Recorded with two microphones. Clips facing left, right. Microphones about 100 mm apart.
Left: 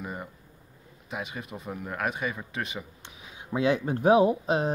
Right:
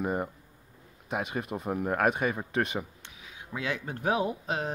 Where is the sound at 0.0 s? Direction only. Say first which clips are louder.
Right 7 dB; 40° right (ahead or behind).